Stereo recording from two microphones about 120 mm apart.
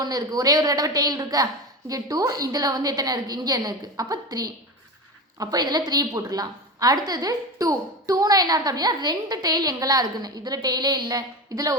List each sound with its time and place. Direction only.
0.0 s a woman's voice: 30° right (ahead or behind)